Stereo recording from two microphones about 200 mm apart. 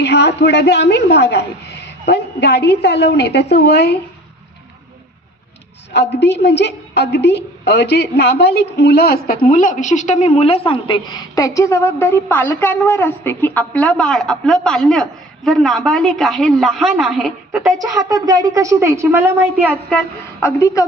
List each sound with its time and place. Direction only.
0.0 s a woman's voice: 55° left (ahead or behind)
5.9 s a woman's voice: 60° left (ahead or behind); by 17.7 s centre (ahead or behind)
17.7 s a woman's voice: 20° right (ahead or behind)
20.4 s a woman's voice: 15° left (ahead or behind)